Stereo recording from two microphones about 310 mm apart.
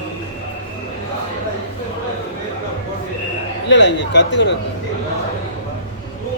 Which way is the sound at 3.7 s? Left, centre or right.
Left.